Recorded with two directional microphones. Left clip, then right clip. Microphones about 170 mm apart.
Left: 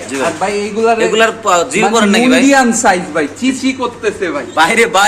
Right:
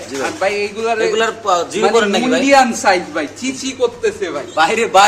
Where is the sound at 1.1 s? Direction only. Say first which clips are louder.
Left 5 dB; centre (ahead or behind).